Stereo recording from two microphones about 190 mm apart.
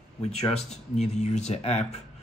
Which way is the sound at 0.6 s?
35° left (ahead or behind).